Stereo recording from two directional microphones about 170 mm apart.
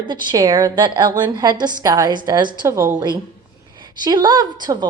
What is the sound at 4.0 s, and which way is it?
Speech, 25° right (ahead or behind).